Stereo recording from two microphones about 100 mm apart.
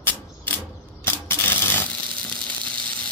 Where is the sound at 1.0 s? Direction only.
25° left (ahead or behind).